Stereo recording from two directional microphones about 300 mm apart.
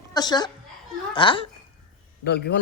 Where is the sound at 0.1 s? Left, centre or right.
Centre.